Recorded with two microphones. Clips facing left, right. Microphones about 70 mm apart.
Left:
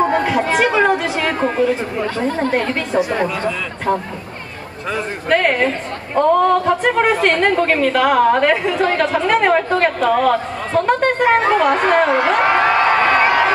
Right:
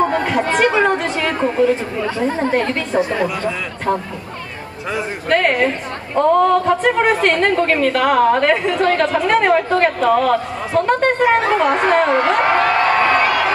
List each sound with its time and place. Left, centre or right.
0.1 s chatter: centre
2.0 s speech: centre
2.5 s a woman's voice: centre
5.3 s a woman's voice: centre
12.5 s a sound: centre
13.2 s run: left